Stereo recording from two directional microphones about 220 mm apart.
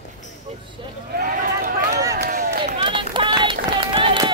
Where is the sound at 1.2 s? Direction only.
40° right (ahead or behind).